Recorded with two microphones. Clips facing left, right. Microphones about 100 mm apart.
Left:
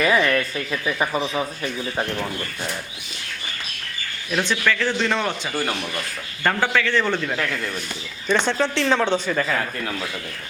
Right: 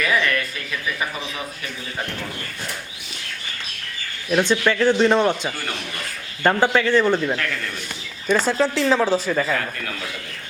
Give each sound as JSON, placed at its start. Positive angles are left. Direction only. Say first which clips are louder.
{"t": 0.0, "sound": "speech", "louder": "left 3 dB", "side_deg": 25}
{"t": 4.3, "sound": "speech", "louder": "right 4 dB", "side_deg": -20}
{"t": 6.9, "sound": "a man's voice", "louder": "right 4 dB", "side_deg": -10}